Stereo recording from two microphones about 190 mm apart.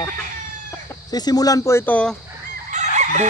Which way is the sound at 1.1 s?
20° left (ahead or behind).